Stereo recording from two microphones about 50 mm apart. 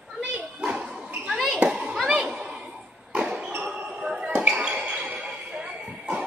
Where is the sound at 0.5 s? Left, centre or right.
Centre.